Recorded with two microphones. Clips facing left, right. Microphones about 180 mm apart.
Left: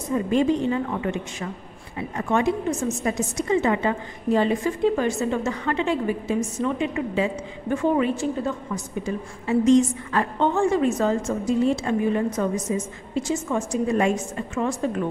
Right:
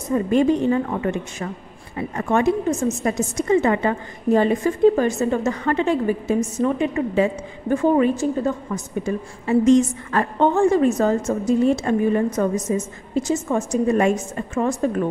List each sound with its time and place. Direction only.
0.1 s a woman's voice: 55° right (ahead or behind)